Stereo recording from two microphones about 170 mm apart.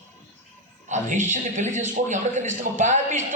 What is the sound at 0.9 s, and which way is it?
Speech, 45° right (ahead or behind).